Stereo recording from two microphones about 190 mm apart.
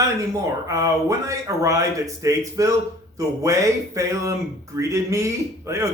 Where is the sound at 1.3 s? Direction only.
15° right (ahead or behind).